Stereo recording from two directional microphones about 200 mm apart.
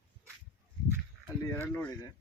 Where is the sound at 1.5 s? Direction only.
10° left (ahead or behind).